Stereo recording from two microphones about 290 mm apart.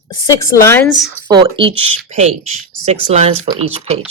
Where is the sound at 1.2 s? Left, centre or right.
Centre.